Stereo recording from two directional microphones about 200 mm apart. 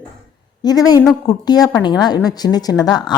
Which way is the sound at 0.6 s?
20° left (ahead or behind).